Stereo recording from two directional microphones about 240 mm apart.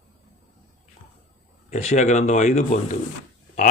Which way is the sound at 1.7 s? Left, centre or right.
Left.